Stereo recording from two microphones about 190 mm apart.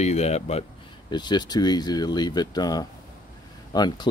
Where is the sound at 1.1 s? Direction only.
25° left (ahead or behind).